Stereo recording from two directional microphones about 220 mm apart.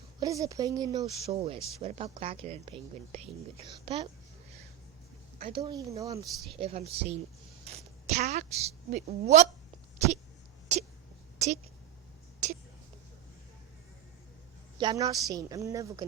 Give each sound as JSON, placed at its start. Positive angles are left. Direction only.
{"t": 0.2, "sound": "a woman's voice", "side_deg": -15}
{"t": 5.4, "sound": "a woman's voice", "side_deg": -25}
{"t": 6.6, "sound": "a woman's voice", "side_deg": -25}
{"t": 10.7, "sound": "a sound", "side_deg": -30}
{"t": 12.4, "sound": "whispering", "side_deg": -35}
{"t": 14.8, "sound": "a woman's voice", "side_deg": -20}